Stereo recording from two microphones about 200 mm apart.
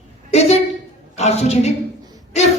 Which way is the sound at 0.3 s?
30° left (ahead or behind).